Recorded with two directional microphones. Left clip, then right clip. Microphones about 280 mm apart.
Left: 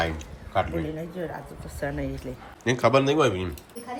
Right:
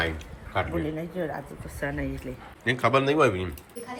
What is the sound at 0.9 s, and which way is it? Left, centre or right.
Speech, centre.